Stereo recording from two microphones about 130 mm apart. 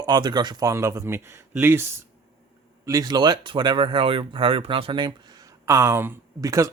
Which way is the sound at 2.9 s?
30° right (ahead or behind).